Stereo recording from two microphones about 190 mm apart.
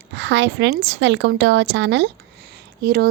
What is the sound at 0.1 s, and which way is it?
A woman's voice, 75° right (ahead or behind).